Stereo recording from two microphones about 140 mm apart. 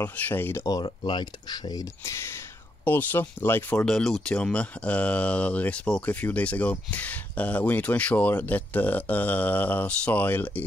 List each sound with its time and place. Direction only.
0.0 s speech: 15° left (ahead or behind)
3.8 s speech: 5° left (ahead or behind)